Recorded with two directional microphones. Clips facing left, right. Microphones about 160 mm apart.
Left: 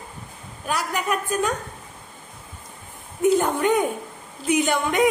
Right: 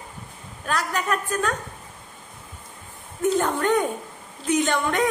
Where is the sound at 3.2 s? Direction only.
10° left (ahead or behind).